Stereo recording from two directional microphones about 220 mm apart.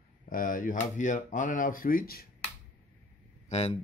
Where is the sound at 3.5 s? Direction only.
30° left (ahead or behind).